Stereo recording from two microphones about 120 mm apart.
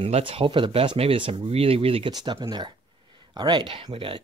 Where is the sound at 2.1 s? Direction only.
35° right (ahead or behind).